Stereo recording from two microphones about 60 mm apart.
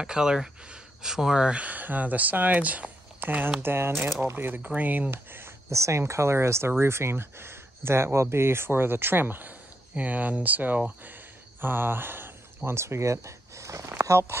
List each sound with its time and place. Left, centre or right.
0.0 s speech: centre; by 3.5 s right
3.6 s speech: right
5.1 s speech: right
5.7 s speech: right
14.0 s speech: right